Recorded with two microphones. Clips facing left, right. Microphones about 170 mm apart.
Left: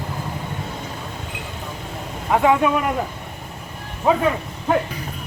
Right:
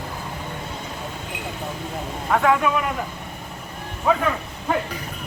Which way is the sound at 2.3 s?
20° left (ahead or behind).